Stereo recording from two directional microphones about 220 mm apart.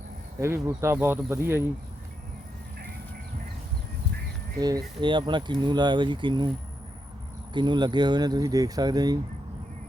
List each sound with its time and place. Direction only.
0.3 s speech: 10° right (ahead or behind)
4.6 s speech: 15° right (ahead or behind)
7.5 s speech: 20° right (ahead or behind)